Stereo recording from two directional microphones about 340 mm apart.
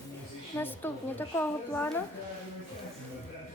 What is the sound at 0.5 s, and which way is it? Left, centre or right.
A woman's voice, centre.